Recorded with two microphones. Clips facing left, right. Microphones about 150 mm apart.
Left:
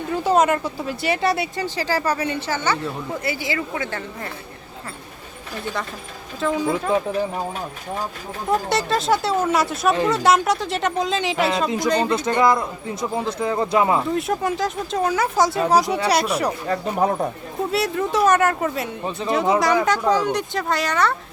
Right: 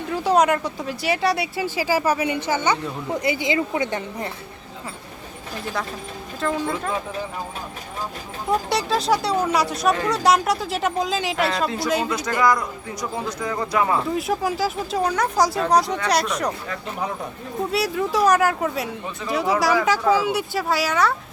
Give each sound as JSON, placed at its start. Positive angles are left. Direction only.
{"t": 0.1, "sound": "speech", "side_deg": 0}
{"t": 6.4, "sound": "speech", "side_deg": 5}
{"t": 8.4, "sound": "speech", "side_deg": 0}
{"t": 12.0, "sound": "speech", "side_deg": 25}
{"t": 14.1, "sound": "speech", "side_deg": 0}
{"t": 16.6, "sound": "speech", "side_deg": 45}
{"t": 17.7, "sound": "speech", "side_deg": 0}
{"t": 19.2, "sound": "speech", "side_deg": 30}
{"t": 19.8, "sound": "speech", "side_deg": -5}